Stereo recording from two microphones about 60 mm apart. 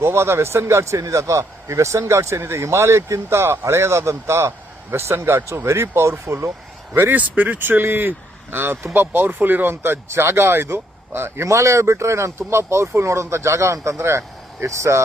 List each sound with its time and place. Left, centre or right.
0.0 s speech: right
6.9 s speech: right
7.2 s speech: right
11.4 s speech: right